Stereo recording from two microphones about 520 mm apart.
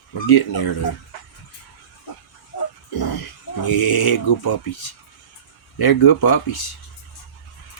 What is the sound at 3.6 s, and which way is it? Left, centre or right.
Speech, left.